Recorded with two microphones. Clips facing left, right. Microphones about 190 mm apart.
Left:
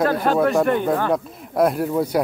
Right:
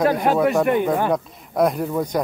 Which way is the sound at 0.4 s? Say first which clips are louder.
Even; centre (ahead or behind).